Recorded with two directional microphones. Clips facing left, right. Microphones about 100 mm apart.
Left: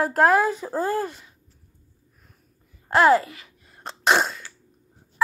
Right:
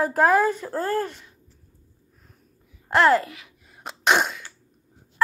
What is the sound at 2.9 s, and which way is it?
Sneeze, 5° left (ahead or behind).